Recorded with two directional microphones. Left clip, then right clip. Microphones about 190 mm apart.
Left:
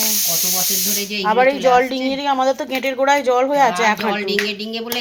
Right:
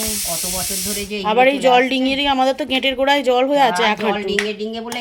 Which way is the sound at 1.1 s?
20° right (ahead or behind).